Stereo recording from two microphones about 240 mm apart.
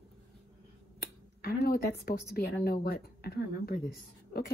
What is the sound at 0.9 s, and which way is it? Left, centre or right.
A woman's voice, left.